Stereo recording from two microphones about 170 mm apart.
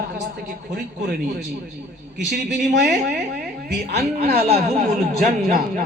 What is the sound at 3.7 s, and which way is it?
Speech, 70° right (ahead or behind).